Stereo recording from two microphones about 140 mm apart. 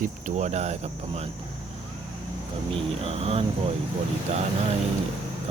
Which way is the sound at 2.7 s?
45° right (ahead or behind).